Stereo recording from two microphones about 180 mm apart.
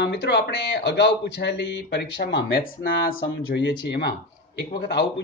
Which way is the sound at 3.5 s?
75° left (ahead or behind).